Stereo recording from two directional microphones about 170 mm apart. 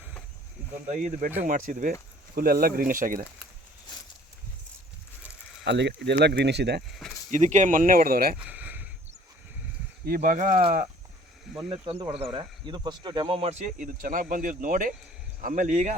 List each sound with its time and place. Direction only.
0.9 s speech: 50° right (ahead or behind)
5.6 s speech: 90° right
7.3 s speech: 45° right (ahead or behind)
8.4 s a sound: 10° right (ahead or behind)
10.1 s speech: 50° right (ahead or behind)
11.7 s speech: 35° right (ahead or behind)